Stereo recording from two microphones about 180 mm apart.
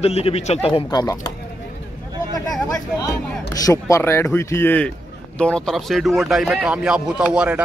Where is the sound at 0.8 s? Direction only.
20° left (ahead or behind).